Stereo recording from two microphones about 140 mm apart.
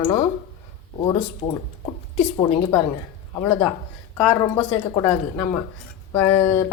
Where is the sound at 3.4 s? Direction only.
15° left (ahead or behind).